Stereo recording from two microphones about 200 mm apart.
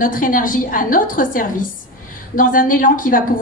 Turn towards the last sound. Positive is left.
turn(degrees=45)  # may be behind; listen again after turning